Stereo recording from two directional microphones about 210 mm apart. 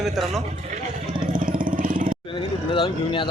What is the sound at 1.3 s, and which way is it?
Vehicle, 40° right (ahead or behind).